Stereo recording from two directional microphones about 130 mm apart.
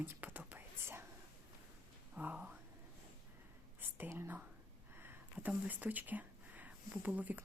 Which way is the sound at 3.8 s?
15° right (ahead or behind).